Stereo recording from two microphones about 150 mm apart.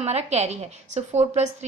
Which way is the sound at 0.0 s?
45° right (ahead or behind).